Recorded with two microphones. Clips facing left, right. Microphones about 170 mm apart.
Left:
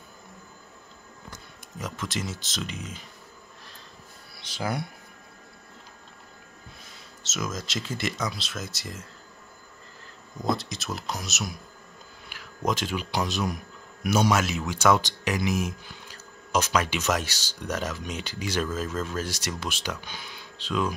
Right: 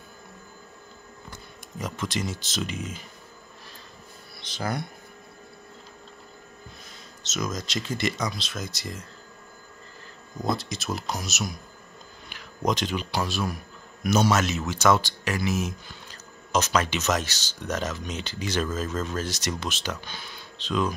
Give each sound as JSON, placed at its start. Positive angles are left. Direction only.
{"t": 1.8, "sound": "speech", "side_deg": 0}
{"t": 4.4, "sound": "a sound", "side_deg": 10}
{"t": 7.2, "sound": "speech", "side_deg": 5}
{"t": 10.4, "sound": "speech", "side_deg": 0}
{"t": 12.3, "sound": "a sound", "side_deg": 5}
{"t": 13.1, "sound": "speech", "side_deg": 20}